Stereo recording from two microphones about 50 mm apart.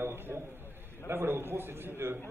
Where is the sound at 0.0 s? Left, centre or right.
Right.